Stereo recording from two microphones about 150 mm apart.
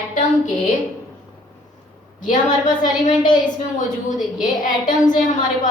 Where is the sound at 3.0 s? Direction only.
60° left (ahead or behind).